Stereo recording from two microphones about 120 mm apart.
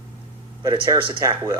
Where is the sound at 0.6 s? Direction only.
30° right (ahead or behind).